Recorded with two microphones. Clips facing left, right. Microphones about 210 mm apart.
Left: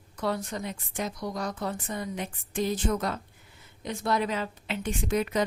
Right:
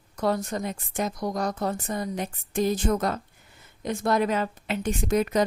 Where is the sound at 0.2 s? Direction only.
45° right (ahead or behind).